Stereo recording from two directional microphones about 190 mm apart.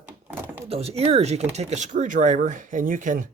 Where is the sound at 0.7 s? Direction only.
30° right (ahead or behind).